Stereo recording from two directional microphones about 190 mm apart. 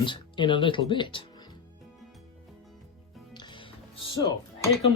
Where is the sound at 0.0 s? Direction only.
25° left (ahead or behind).